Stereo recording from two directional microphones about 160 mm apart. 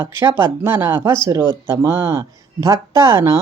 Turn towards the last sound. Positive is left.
turn(degrees=-20)  # may be behind; listen again after turning